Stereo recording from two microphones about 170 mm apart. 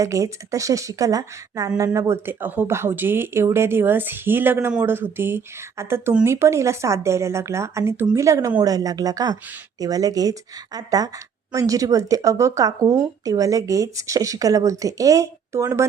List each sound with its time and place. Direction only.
0.0 s a woman's voice: 20° right (ahead or behind)